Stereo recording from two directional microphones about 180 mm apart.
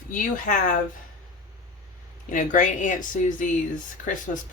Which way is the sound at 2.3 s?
45° left (ahead or behind).